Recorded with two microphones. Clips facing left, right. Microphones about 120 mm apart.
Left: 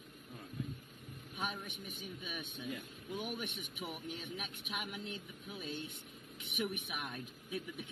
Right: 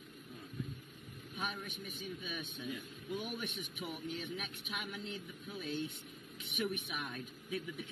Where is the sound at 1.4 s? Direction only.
15° left (ahead or behind).